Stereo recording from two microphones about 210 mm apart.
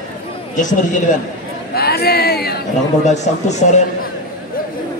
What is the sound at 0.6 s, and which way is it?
Speech, 35° left (ahead or behind).